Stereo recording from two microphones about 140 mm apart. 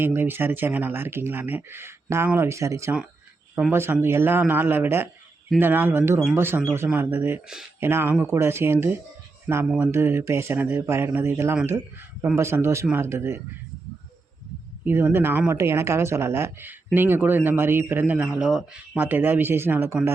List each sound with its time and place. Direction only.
0.0 s speech: 15° right (ahead or behind)
14.8 s speech: 15° right (ahead or behind)